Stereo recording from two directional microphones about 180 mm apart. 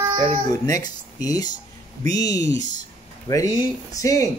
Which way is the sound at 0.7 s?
20° left (ahead or behind).